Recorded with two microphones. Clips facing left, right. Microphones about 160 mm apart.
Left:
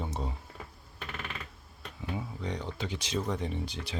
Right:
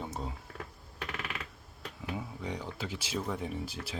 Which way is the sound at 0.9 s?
80° right.